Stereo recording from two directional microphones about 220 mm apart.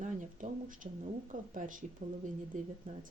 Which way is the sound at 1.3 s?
35° right (ahead or behind).